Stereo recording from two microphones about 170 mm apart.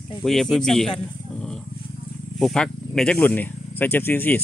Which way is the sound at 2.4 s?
5° left (ahead or behind).